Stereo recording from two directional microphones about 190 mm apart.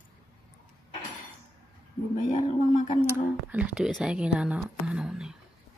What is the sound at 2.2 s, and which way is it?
Speech, 40° left (ahead or behind).